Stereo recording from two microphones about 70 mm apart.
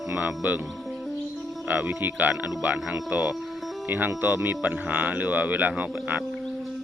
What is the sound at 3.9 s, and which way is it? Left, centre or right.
Speech, right.